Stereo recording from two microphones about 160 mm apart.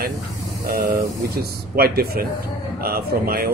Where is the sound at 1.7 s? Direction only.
75° right (ahead or behind).